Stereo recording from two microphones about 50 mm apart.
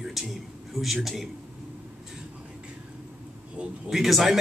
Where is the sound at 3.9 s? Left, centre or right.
Centre.